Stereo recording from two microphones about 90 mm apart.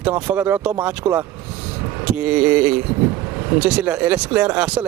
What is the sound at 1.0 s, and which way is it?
Speech, 40° right (ahead or behind).